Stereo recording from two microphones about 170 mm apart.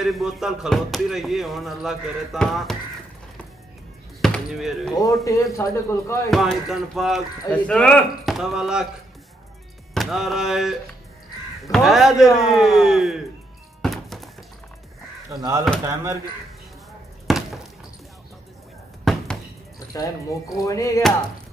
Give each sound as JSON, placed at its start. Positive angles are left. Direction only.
{"t": 0.0, "sound": "speech", "side_deg": 0}
{"t": 4.2, "sound": "speech", "side_deg": 0}
{"t": 5.0, "sound": "speech", "side_deg": 20}
{"t": 6.3, "sound": "speech", "side_deg": 0}
{"t": 9.9, "sound": "speech", "side_deg": 0}
{"t": 13.8, "sound": "thunk", "side_deg": 0}
{"t": 15.2, "sound": "speech", "side_deg": -20}
{"t": 17.3, "sound": "a sound", "side_deg": 0}
{"t": 19.1, "sound": "a sound", "side_deg": 0}
{"t": 20.5, "sound": "speech", "side_deg": 20}